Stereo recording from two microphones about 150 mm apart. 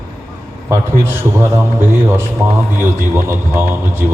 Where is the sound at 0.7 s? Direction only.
15° right (ahead or behind).